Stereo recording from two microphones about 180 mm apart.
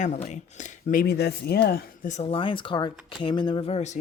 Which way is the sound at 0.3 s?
40° left (ahead or behind).